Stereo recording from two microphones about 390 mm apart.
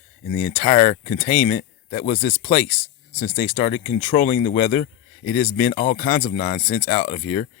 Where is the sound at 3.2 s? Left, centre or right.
Left.